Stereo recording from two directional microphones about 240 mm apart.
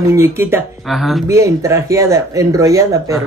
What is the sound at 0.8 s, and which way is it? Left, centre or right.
Speech, centre.